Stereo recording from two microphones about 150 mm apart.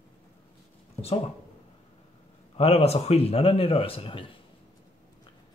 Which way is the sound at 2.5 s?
45° left (ahead or behind).